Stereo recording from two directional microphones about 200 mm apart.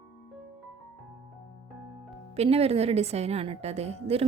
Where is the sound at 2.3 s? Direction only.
30° right (ahead or behind).